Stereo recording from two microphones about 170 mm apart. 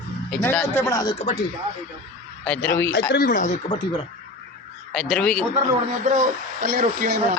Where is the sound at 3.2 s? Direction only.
50° left (ahead or behind).